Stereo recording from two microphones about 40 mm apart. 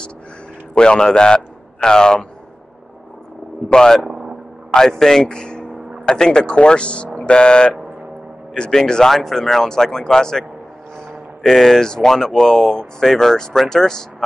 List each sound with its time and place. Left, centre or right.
0.7 s a man's voice: left
3.6 s speech: centre
4.0 s vehicle: centre
4.7 s a man's voice: centre